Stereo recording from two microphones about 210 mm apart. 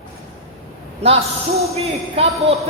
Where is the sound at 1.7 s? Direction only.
30° right (ahead or behind).